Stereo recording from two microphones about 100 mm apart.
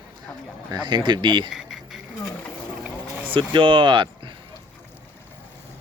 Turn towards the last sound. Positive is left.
turn(degrees=-55)  # may be behind; listen again after turning